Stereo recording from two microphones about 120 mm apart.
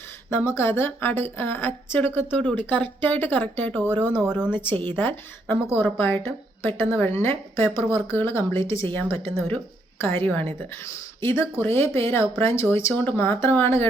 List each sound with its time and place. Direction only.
0.3 s speech: 20° left (ahead or behind)